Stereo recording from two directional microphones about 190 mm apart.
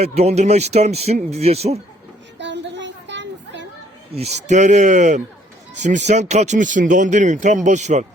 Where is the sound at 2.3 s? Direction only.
70° right (ahead or behind).